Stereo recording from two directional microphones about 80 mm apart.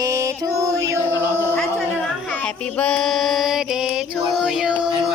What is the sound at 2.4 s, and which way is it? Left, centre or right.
Music, centre.